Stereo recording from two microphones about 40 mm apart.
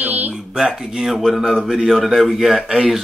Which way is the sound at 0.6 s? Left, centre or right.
Centre.